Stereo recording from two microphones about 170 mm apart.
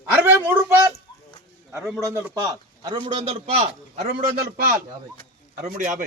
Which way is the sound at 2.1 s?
15° right (ahead or behind).